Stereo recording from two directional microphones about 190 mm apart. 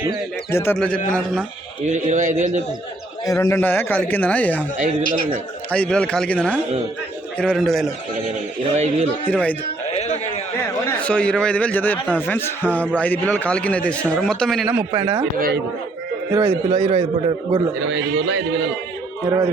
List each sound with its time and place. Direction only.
0.5 s a man's voice: 10° left (ahead or behind)
1.9 s a man's voice: 40° right (ahead or behind)
3.2 s a man's voice: 15° left (ahead or behind)
5.7 s a man's voice: 5° left (ahead or behind)
8.7 s a man's voice: 35° right (ahead or behind)
9.2 s a man's voice: 10° left (ahead or behind)
9.9 s a sound: 35° left (ahead or behind)
10.8 s a man's voice: 5° left (ahead or behind)
14.9 s speech: 15° right (ahead or behind)
15.4 s speech: 55° right (ahead or behind)
16.3 s a man's voice: 15° right (ahead or behind)
17.7 s a man's voice: 70° right (ahead or behind)